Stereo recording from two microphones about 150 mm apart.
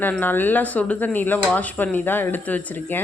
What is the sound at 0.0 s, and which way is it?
Speech, 10° left (ahead or behind).